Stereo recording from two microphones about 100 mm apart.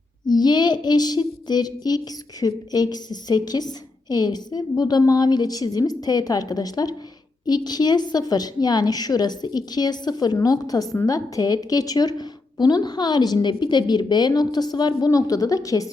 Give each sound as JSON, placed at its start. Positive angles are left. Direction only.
{"t": 0.3, "sound": "a woman's voice", "side_deg": 45}